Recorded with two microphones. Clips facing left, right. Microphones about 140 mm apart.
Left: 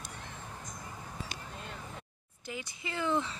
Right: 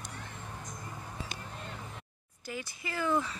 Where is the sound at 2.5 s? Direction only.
20° left (ahead or behind).